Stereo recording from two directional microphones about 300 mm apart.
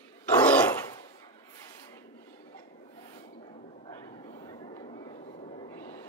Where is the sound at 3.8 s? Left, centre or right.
Centre.